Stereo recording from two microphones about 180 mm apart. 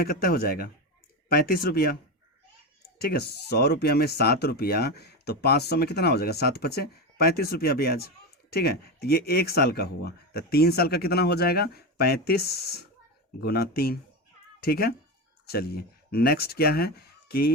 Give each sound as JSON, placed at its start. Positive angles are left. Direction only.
{"t": 0.0, "sound": "speech", "side_deg": 55}
{"t": 3.0, "sound": "speech", "side_deg": 60}